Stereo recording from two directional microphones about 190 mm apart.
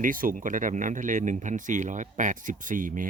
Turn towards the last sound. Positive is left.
turn(degrees=-45)  # may be behind; listen again after turning